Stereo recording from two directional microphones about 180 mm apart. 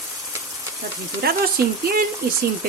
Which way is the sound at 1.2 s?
55° right (ahead or behind).